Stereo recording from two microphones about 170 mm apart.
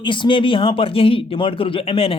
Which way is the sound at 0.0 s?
30° left (ahead or behind).